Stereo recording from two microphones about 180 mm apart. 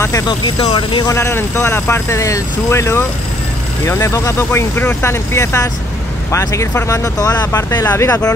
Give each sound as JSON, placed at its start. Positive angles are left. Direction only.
{"t": 0.6, "sound": "speech", "side_deg": 25}
{"t": 1.1, "sound": "speech", "side_deg": 15}